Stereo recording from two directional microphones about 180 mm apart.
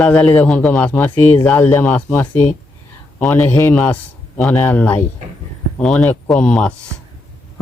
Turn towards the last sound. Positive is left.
turn(degrees=5)  # may be behind; listen again after turning